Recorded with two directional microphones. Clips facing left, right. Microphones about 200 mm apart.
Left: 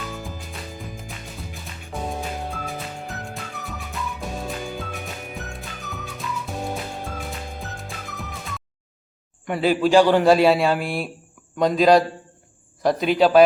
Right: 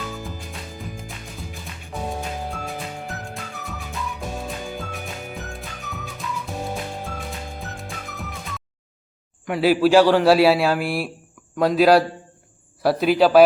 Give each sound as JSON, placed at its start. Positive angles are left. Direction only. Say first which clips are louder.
{"t": 0.1, "sound": "music", "louder": "right 1 dB", "side_deg": 0}
{"t": 9.5, "sound": "a man's voice", "louder": "right 2 dB", "side_deg": -5}